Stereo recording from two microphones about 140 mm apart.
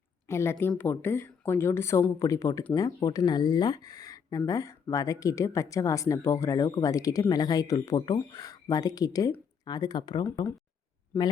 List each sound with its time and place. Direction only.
0.3 s speech: 20° left (ahead or behind)